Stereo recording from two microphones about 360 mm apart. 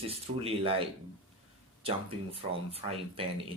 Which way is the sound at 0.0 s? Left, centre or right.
Centre.